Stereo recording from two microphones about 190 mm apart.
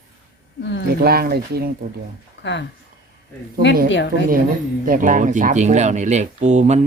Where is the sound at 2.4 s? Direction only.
70° left (ahead or behind).